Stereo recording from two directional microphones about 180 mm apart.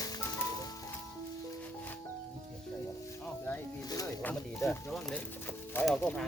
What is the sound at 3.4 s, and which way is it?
Music, 15° left (ahead or behind).